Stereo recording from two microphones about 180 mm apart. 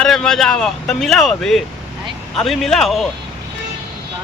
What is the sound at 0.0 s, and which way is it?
Speech, 5° left (ahead or behind).